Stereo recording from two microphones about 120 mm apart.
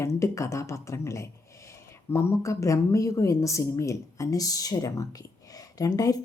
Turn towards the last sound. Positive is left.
turn(degrees=30)  # may be behind; listen again after turning